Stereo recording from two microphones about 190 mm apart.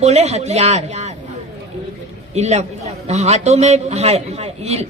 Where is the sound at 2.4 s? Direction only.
35° right (ahead or behind).